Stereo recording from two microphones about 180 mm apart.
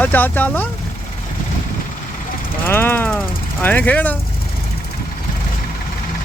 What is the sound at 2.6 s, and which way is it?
A man's voice, 10° left (ahead or behind).